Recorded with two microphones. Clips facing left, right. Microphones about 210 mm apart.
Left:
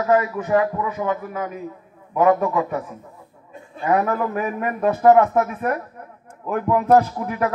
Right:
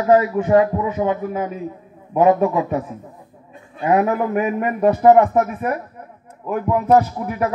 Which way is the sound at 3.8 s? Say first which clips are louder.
Right 3 dB; 20° right (ahead or behind).